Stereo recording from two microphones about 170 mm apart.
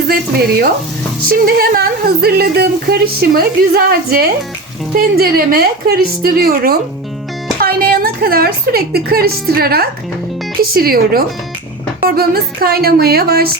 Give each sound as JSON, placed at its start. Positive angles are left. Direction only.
{"t": 0.1, "sound": "a woman's voice", "side_deg": -65}